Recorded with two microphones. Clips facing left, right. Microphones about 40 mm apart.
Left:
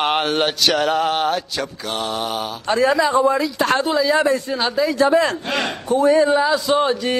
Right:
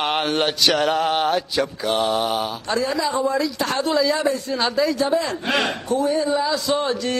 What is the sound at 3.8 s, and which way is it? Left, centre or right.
Speech, centre.